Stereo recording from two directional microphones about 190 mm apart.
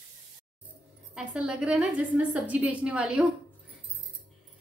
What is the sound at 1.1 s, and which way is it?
A woman's voice, 5° right (ahead or behind).